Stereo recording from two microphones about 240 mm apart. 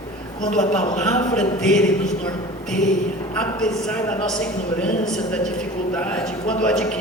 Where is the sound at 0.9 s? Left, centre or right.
Centre.